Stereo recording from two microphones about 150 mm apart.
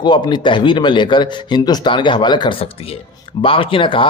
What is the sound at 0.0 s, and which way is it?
Speech, 30° left (ahead or behind).